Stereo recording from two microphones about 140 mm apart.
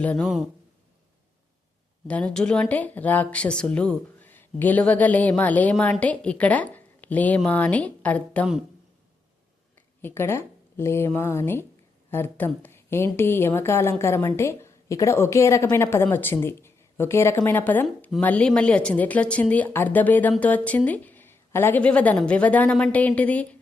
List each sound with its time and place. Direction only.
0.0 s a woman's voice: 10° left (ahead or behind)
2.0 s a woman's voice: 10° left (ahead or behind)
10.0 s a woman's voice: 15° left (ahead or behind)